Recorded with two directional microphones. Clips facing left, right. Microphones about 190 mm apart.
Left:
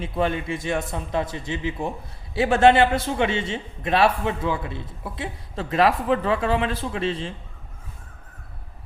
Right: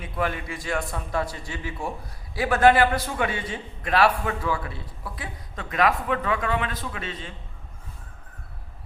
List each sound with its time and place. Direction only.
0.0 s a man's voice: 25° left (ahead or behind)